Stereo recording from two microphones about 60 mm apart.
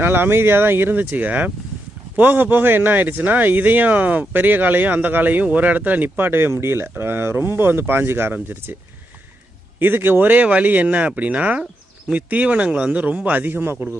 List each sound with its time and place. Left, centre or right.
0.0 s speech: right
9.7 s speech: right